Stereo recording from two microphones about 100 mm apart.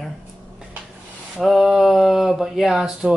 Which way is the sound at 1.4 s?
5° right (ahead or behind).